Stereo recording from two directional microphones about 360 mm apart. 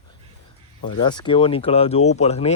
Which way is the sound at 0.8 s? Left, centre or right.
Centre.